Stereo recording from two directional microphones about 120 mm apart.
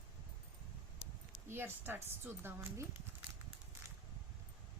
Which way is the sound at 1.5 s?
20° right (ahead or behind).